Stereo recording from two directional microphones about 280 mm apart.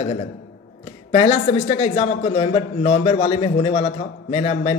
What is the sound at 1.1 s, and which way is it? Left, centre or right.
A man's voice, left.